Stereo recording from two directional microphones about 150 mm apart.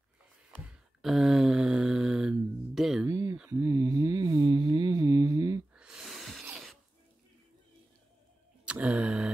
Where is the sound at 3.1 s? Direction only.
20° right (ahead or behind).